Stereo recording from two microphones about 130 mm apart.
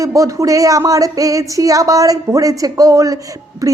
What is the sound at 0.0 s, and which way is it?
A woman's voice, 25° right (ahead or behind).